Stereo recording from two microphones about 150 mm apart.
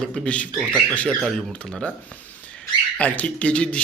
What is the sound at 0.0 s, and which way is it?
Speech, 5° left (ahead or behind).